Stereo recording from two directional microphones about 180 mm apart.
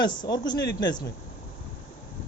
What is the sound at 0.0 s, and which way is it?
Speech, 25° left (ahead or behind).